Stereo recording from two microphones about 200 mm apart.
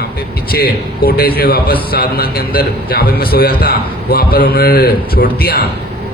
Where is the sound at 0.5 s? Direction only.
50° left (ahead or behind).